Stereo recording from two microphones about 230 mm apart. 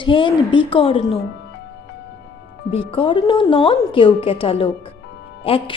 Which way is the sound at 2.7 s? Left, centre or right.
Left.